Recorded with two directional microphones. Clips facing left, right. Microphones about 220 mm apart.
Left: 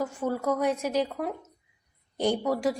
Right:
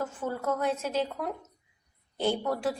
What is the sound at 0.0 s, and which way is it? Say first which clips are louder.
A woman's voice: left 4 dB; 10° left (ahead or behind).